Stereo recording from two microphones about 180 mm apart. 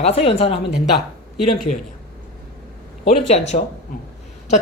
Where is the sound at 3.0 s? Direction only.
40° left (ahead or behind).